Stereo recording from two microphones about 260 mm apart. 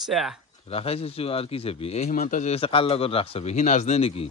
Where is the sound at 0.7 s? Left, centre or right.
Left.